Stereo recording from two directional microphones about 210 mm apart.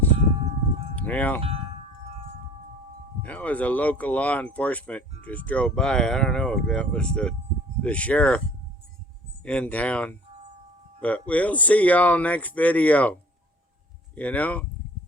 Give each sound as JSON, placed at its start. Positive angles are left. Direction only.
{"t": 0.9, "sound": "wind chime", "side_deg": 5}
{"t": 1.4, "sound": "wind chime", "side_deg": -30}
{"t": 3.2, "sound": "speech", "side_deg": 5}
{"t": 9.4, "sound": "speech", "side_deg": 5}
{"t": 14.2, "sound": "speech", "side_deg": 5}